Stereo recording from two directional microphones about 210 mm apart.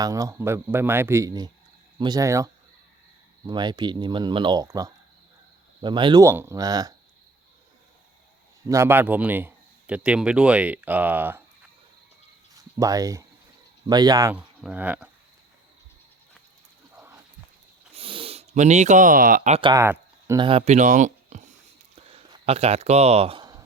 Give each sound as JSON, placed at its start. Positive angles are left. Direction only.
{"t": 0.0, "sound": "speech", "side_deg": -15}
{"t": 8.6, "sound": "speech", "side_deg": -15}
{"t": 12.7, "sound": "speech", "side_deg": -15}
{"t": 14.3, "sound": "speech", "side_deg": -5}
{"t": 17.9, "sound": "speech", "side_deg": -25}
{"t": 19.7, "sound": "speech", "side_deg": -10}